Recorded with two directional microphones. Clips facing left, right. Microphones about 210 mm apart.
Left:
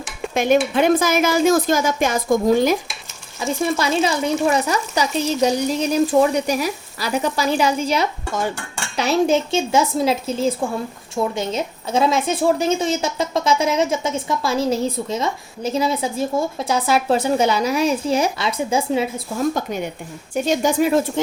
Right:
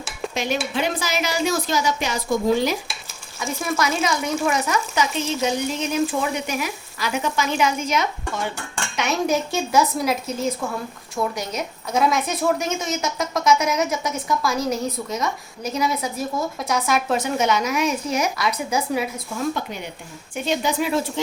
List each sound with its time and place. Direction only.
0.3 s a woman's voice: 50° left (ahead or behind)
3.4 s frying: 30° left (ahead or behind)
9.0 s a woman's voice: 30° left (ahead or behind)
20.3 s a woman's voice: 45° left (ahead or behind)